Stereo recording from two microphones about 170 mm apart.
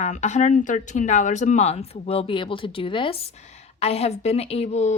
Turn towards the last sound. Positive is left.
turn(degrees=40)  # may be behind; listen again after turning